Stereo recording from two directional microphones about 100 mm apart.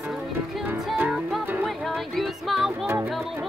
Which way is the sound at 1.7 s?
Centre (ahead or behind).